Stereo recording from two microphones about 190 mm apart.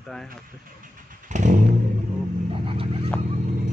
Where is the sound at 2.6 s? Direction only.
30° right (ahead or behind).